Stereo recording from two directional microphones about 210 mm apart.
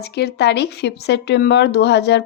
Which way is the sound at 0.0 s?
50° left (ahead or behind).